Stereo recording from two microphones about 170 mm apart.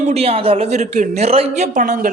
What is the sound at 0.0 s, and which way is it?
A woman's voice, 40° right (ahead or behind).